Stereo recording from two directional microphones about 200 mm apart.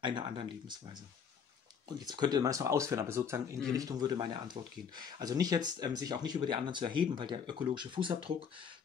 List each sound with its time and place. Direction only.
0.0 s speech: 25° right (ahead or behind)
2.0 s speech: 20° right (ahead or behind)